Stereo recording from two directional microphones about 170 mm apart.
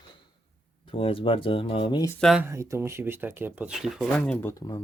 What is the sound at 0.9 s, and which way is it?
Speech, 30° left (ahead or behind).